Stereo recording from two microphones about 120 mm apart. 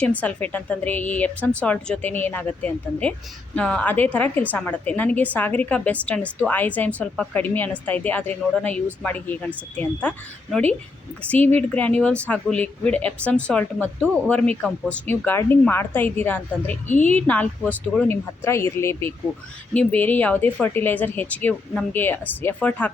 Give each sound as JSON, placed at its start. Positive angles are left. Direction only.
{"t": 0.0, "sound": "a woman's voice", "side_deg": 10}